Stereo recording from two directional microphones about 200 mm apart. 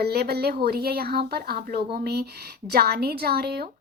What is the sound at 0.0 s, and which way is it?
Speech, 50° right (ahead or behind).